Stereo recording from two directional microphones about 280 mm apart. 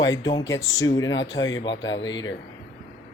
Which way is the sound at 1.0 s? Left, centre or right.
Left.